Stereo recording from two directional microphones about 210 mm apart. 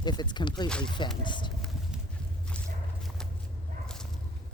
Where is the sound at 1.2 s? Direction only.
20° left (ahead or behind).